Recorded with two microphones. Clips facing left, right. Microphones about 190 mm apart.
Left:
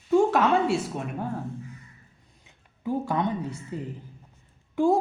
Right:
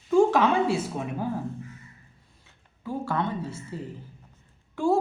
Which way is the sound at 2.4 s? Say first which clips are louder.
Left 6 dB; 15° left (ahead or behind).